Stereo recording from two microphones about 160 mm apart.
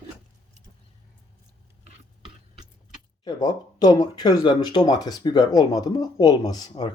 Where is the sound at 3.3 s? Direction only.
25° left (ahead or behind).